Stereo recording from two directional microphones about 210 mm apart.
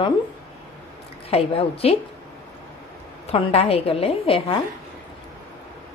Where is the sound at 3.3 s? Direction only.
30° left (ahead or behind).